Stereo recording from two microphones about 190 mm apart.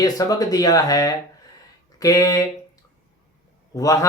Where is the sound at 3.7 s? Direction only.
15° left (ahead or behind).